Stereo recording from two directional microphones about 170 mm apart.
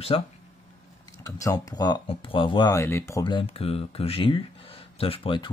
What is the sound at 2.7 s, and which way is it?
Speech, 15° left (ahead or behind).